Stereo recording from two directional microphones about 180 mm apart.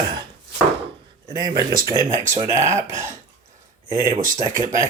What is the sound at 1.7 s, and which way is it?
Speech, 55° right (ahead or behind).